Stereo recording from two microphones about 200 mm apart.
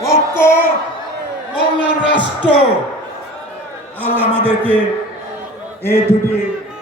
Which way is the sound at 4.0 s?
10° right (ahead or behind).